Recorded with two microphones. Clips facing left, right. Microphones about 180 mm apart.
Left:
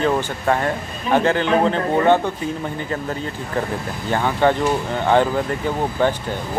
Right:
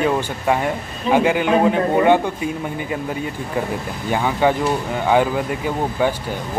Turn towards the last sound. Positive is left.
turn(degrees=-10)  # may be behind; listen again after turning